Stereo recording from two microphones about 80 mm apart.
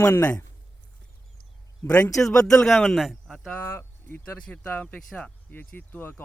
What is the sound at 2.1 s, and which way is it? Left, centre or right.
Speech, centre.